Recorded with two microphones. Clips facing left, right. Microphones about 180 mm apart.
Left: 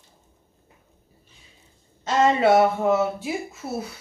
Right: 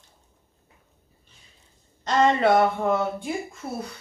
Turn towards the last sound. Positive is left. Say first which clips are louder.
# left 2 dB
turn(degrees=5)  # may be behind; listen again after turning